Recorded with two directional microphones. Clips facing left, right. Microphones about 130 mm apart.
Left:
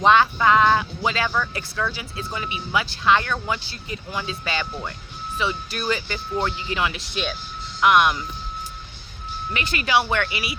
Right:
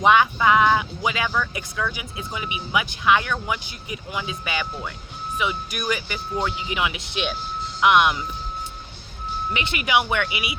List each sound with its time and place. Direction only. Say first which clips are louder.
0.0 s speech: even; 15° right (ahead or behind)
9.5 s speech: left 1 dB; 20° right (ahead or behind)